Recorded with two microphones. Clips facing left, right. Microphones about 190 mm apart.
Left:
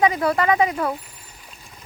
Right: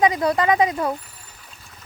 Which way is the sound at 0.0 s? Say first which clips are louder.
Even; 15° right (ahead or behind).